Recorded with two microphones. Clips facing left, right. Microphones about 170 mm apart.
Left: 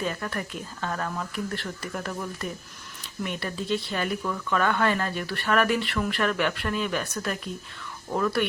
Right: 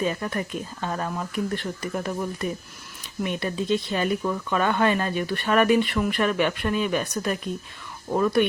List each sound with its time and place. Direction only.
0.0 s speech: 20° right (ahead or behind)